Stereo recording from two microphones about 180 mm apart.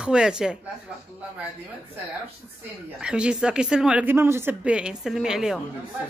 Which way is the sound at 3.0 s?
5° right (ahead or behind).